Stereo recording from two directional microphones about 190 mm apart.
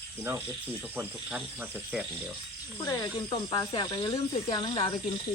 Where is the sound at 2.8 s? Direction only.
20° left (ahead or behind).